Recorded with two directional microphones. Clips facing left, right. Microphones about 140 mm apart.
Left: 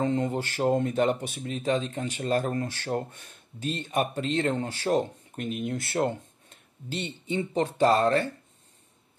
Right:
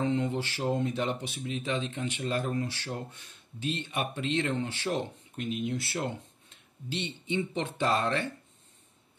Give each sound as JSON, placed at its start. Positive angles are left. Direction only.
{"t": 0.0, "sound": "speech", "side_deg": 45}